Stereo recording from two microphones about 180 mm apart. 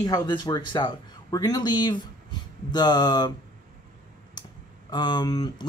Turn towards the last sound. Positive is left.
turn(degrees=20)  # may be behind; listen again after turning